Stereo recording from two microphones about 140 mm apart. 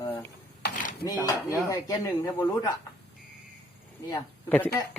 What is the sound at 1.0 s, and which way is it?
Speech, 25° left (ahead or behind).